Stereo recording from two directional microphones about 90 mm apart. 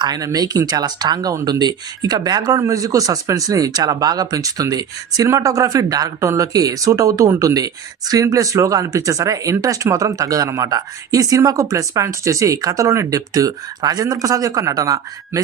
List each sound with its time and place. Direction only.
0.0 s speech: 50° right (ahead or behind)